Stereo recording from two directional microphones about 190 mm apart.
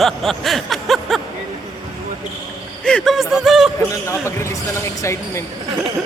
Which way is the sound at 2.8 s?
5° left (ahead or behind).